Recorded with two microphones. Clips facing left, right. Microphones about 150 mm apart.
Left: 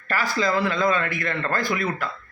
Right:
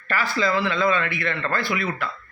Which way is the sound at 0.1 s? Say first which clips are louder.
Even; 40° left (ahead or behind).